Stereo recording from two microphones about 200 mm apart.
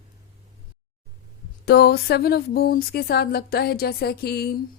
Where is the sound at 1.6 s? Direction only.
55° left (ahead or behind).